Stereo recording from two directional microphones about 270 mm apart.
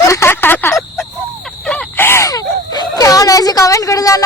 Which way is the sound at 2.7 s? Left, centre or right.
Centre.